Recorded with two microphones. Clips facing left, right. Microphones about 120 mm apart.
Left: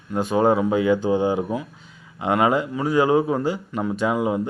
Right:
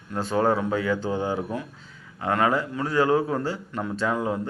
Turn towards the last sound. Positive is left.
turn(degrees=10)  # may be behind; listen again after turning